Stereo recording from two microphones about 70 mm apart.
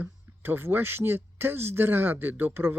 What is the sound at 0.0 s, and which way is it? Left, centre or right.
Speech, right.